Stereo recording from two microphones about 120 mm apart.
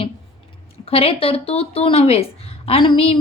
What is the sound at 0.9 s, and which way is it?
A woman's voice, 55° left (ahead or behind).